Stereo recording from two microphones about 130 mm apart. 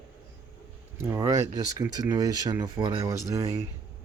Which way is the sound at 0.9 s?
20° right (ahead or behind).